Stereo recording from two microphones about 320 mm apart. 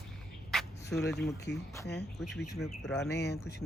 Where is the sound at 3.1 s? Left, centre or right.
Left.